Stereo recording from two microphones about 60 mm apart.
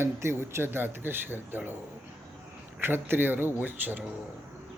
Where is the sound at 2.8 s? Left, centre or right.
Right.